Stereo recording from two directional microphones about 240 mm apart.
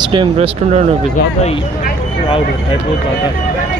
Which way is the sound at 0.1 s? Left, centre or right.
Right.